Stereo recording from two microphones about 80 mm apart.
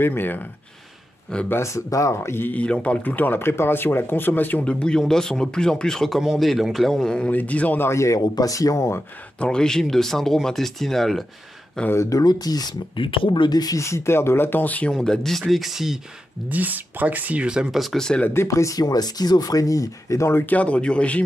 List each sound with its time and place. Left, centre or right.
0.0 s speech: left
1.5 s speech: left; by 7.8 s centre
7.8 s speech: left
8.4 s speech: left
9.4 s speech: centre
11.9 s speech: left
12.2 s speech: left
12.9 s speech: left
13.8 s speech: left; by 15.0 s centre
15.0 s speech: centre
16.4 s speech: right; by 18.2 s centre
18.2 s speech: left
18.5 s speech: left
20.4 s speech: centre